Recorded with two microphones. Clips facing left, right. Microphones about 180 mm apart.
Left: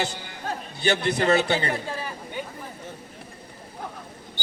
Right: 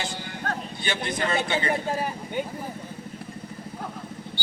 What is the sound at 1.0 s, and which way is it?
Speech, 70° left (ahead or behind).